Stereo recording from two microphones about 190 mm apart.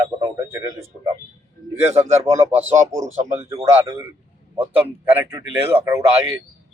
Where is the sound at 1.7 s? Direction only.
35° right (ahead or behind).